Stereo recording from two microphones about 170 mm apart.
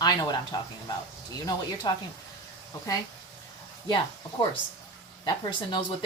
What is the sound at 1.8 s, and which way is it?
Speech, 25° left (ahead or behind).